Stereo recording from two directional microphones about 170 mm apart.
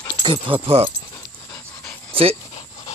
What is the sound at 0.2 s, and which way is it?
Speech, 30° right (ahead or behind).